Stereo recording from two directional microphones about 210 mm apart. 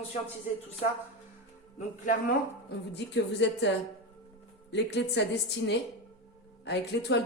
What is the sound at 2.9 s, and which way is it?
A woman's voice, 55° left (ahead or behind).